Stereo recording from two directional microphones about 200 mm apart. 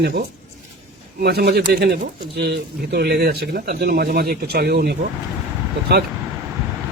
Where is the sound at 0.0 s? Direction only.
55° right (ahead or behind).